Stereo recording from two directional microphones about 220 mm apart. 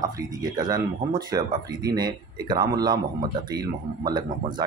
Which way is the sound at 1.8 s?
20° right (ahead or behind).